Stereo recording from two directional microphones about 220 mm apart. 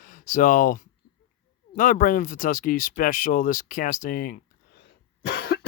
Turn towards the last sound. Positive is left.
turn(degrees=50)  # may be behind; listen again after turning